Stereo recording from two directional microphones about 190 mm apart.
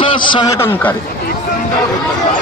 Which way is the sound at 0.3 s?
20° left (ahead or behind).